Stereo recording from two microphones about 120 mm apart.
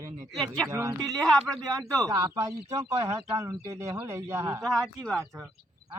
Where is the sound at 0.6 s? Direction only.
25° right (ahead or behind).